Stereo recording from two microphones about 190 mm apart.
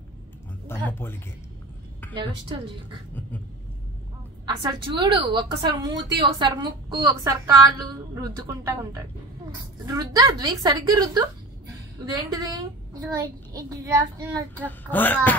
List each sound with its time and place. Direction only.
0.7 s a child's voice: 10° left (ahead or behind)
2.1 s a woman's voice: 25° right (ahead or behind)
4.5 s a woman's voice: 25° right (ahead or behind)
14.6 s a child's voice: 10° left (ahead or behind)